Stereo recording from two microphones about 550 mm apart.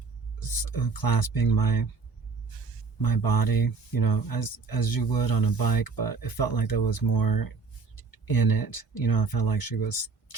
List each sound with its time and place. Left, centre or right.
0.3 s speech: left
3.0 s speech: left